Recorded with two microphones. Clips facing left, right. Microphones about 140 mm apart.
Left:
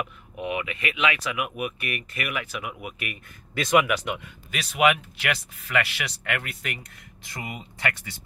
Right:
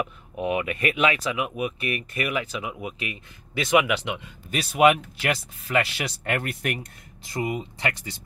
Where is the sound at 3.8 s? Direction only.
15° right (ahead or behind).